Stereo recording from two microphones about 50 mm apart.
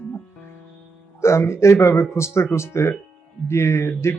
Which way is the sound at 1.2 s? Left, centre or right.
Left.